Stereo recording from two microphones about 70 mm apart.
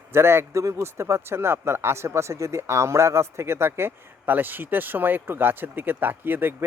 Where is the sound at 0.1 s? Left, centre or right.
Right.